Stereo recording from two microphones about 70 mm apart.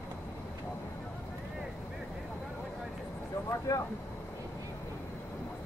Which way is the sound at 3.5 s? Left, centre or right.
Left.